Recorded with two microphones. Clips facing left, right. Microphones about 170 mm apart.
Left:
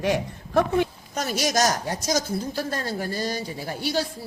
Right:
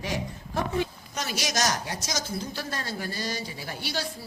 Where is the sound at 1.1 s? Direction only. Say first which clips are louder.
Left 6 dB; 45° left (ahead or behind).